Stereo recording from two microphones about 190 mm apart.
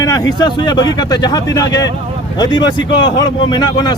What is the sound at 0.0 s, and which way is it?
Speech, 20° left (ahead or behind).